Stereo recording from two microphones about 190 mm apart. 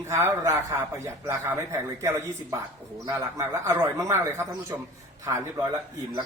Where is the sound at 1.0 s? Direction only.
15° right (ahead or behind).